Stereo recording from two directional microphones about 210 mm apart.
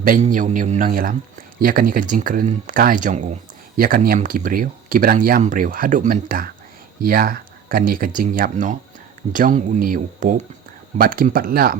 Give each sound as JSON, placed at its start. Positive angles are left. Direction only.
{"t": 0.0, "sound": "speech", "side_deg": -40}